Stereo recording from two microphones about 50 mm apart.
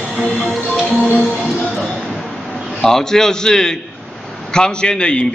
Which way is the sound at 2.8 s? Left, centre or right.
Centre.